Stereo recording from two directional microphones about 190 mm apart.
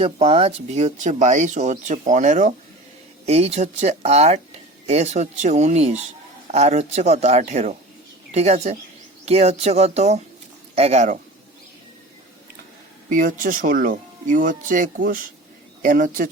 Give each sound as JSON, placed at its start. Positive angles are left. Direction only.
{"t": 0.0, "sound": "speech", "side_deg": -35}
{"t": 13.1, "sound": "speech", "side_deg": -45}